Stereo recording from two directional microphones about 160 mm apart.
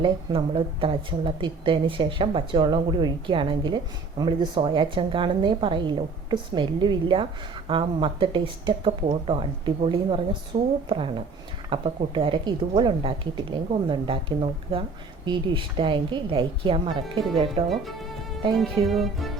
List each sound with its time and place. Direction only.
0.0 s a woman's voice: 30° right (ahead or behind)
17.7 s speech: centre (ahead or behind)
18.5 s music: centre (ahead or behind)